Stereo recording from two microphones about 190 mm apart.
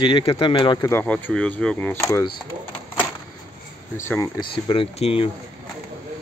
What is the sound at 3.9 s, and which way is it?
Speech, 15° left (ahead or behind).